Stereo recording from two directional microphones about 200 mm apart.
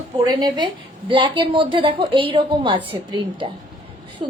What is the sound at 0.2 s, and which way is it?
A woman's voice, 20° right (ahead or behind).